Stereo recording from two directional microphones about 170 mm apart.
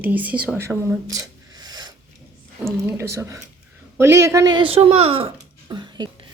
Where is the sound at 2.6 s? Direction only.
15° right (ahead or behind).